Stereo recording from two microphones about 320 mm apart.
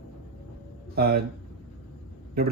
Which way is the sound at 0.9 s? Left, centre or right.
Right.